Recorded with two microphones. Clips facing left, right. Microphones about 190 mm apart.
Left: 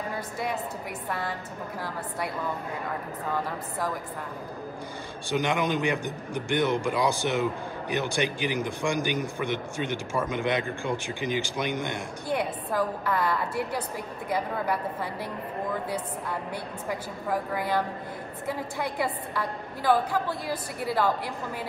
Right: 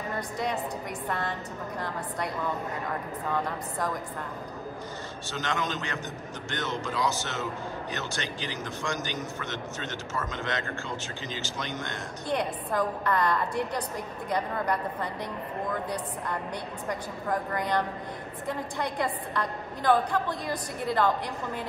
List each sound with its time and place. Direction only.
0.1 s a woman's voice: 5° left (ahead or behind)
5.3 s a man's voice: 15° left (ahead or behind)
16.8 s a woman's voice: 5° left (ahead or behind)